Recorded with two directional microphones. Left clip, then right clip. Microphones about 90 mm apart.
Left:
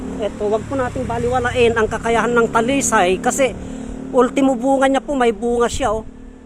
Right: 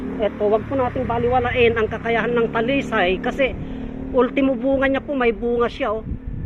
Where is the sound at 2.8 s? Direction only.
55° left (ahead or behind).